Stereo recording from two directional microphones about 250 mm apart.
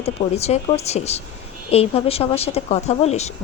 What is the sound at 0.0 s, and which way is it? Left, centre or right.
A woman's voice, left.